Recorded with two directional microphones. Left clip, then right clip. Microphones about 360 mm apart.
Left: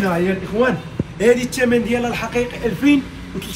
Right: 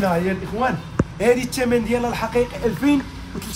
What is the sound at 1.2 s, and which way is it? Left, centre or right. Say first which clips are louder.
Speech: left 4 dB; centre.